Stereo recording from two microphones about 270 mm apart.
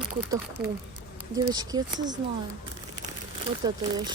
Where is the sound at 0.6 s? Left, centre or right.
Right.